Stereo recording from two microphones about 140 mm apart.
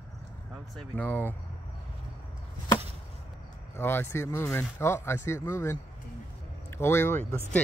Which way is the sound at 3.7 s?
15° left (ahead or behind).